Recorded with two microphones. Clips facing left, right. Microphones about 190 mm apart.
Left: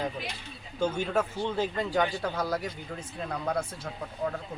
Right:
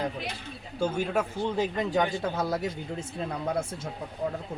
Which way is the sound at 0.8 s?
10° right (ahead or behind).